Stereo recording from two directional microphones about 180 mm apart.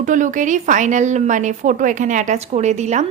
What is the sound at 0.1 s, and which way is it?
A woman's voice, 45° right (ahead or behind).